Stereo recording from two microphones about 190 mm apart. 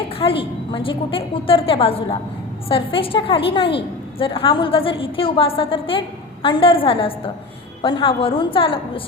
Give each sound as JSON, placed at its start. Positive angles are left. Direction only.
{"t": 0.2, "sound": "a woman's voice", "side_deg": 30}